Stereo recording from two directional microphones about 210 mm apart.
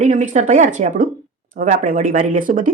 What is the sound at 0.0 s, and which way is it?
Speech, 35° right (ahead or behind).